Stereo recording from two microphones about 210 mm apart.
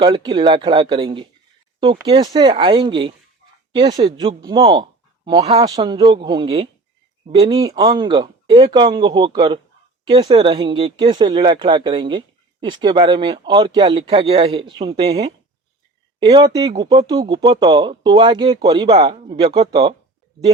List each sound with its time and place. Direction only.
0.0 s speech: 25° right (ahead or behind)